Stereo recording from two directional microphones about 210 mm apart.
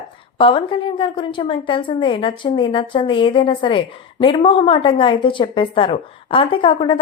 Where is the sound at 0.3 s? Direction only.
25° left (ahead or behind).